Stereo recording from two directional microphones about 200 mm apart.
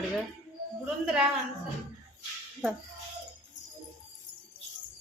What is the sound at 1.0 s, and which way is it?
Speech, centre (ahead or behind).